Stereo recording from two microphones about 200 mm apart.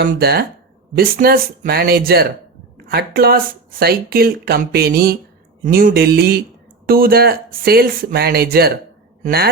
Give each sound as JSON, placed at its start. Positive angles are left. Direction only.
{"t": 0.0, "sound": "speech", "side_deg": -50}